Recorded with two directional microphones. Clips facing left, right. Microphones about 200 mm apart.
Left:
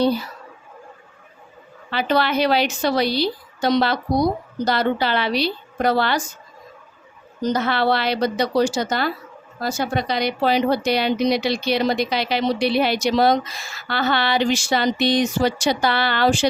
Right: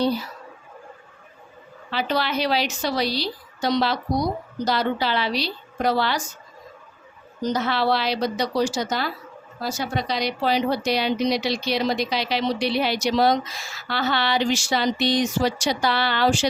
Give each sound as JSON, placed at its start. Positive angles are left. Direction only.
{"t": 1.9, "sound": "a woman's voice", "side_deg": 60}
{"t": 7.5, "sound": "a woman's voice", "side_deg": 55}